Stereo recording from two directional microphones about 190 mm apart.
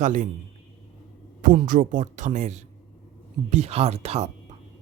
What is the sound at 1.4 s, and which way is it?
A woman's voice, 45° right (ahead or behind).